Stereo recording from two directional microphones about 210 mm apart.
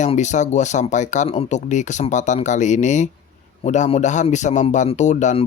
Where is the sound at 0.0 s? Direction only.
35° left (ahead or behind).